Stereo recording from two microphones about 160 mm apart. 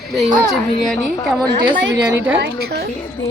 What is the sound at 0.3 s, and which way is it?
Speech, 25° right (ahead or behind).